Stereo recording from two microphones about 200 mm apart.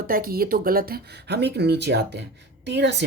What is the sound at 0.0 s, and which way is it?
Speech, 45° right (ahead or behind).